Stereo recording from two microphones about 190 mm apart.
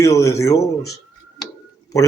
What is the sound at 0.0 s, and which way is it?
A man's voice, 15° left (ahead or behind).